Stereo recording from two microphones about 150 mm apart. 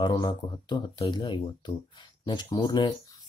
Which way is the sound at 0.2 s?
30° left (ahead or behind).